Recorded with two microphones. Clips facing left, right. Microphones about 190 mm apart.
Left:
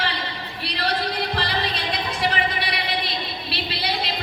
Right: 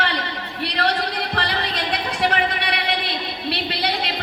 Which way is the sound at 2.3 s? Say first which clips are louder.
Right 3 dB; 65° right (ahead or behind).